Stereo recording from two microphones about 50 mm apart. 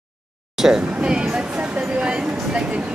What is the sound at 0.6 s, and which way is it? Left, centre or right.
Speech, centre.